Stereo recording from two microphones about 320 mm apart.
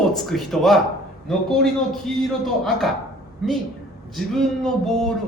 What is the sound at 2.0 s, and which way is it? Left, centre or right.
Speech, centre.